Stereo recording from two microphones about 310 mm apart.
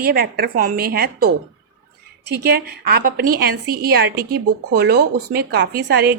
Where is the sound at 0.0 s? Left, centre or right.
Right.